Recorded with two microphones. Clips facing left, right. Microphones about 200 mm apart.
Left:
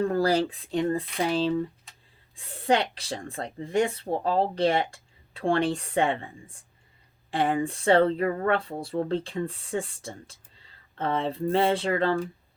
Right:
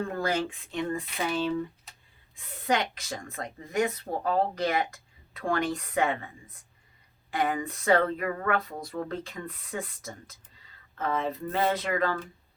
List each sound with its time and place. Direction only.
0.1 s speech: 35° left (ahead or behind)